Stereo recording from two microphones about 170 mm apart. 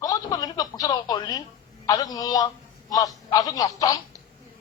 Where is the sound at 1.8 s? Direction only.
20° left (ahead or behind).